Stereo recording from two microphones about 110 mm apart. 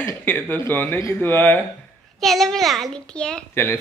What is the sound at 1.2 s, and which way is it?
Speech, 15° left (ahead or behind).